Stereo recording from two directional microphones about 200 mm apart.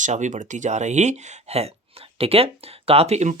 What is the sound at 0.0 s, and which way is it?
Speech, 35° right (ahead or behind).